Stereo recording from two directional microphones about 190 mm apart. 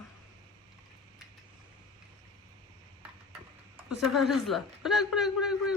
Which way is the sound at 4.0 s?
Centre (ahead or behind).